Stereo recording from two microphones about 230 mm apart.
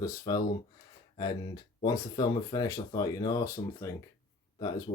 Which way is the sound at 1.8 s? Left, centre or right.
Centre.